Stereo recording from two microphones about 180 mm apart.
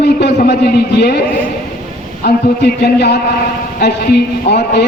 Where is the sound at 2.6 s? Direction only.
60° left (ahead or behind).